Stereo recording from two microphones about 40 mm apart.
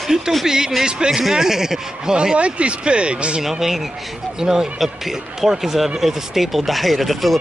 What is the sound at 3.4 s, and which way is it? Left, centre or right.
Speech, centre.